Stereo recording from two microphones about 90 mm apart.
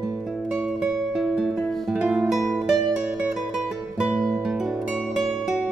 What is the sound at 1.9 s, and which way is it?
Music, 10° right (ahead or behind).